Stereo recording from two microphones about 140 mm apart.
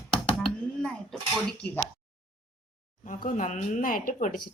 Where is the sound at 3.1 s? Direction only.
70° left (ahead or behind).